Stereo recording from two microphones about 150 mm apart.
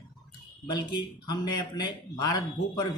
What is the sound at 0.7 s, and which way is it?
A man's voice, 30° left (ahead or behind).